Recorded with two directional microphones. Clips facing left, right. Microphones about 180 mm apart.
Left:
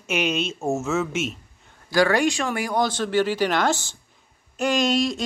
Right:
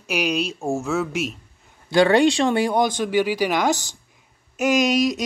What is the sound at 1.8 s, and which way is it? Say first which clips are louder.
Speech: right 4 dB; 25° right (ahead or behind).